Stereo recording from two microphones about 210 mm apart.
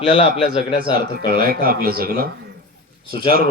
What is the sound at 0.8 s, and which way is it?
A man's voice, 45° right (ahead or behind).